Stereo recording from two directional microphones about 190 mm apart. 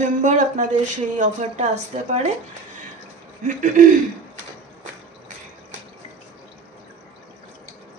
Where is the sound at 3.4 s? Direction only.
45° right (ahead or behind).